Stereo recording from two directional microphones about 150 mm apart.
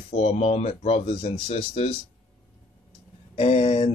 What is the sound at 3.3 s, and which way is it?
Speech, 45° left (ahead or behind).